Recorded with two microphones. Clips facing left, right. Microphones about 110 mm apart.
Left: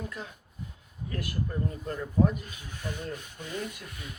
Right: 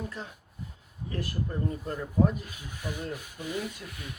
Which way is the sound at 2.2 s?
5° right (ahead or behind).